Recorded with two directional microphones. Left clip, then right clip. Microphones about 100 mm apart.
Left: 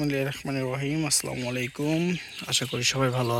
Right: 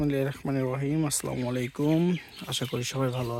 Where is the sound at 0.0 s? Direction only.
35° right (ahead or behind).